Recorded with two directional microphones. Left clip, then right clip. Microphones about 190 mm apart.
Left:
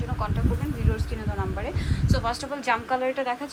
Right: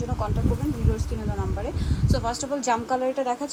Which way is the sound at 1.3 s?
15° right (ahead or behind).